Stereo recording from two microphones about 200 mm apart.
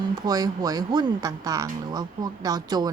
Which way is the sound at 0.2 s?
20° right (ahead or behind).